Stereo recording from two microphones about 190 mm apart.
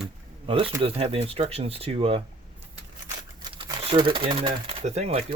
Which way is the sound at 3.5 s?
30° right (ahead or behind).